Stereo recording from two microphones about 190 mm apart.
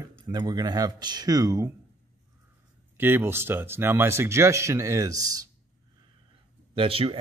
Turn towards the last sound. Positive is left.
turn(degrees=-30)  # may be behind; listen again after turning